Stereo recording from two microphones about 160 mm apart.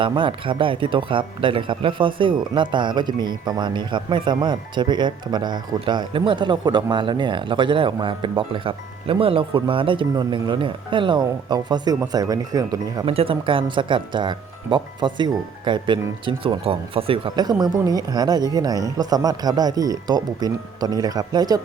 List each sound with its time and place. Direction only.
0.0 s speech: 30° right (ahead or behind)
13.1 s speech: 35° right (ahead or behind)